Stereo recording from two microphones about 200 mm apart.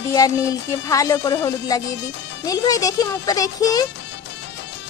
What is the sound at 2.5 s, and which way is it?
A woman's voice, 20° left (ahead or behind).